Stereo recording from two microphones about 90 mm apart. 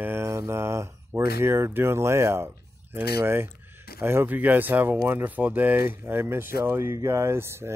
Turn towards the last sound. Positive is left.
turn(degrees=-30)  # may be behind; listen again after turning